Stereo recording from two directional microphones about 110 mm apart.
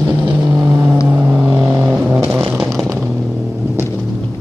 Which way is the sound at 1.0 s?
15° right (ahead or behind).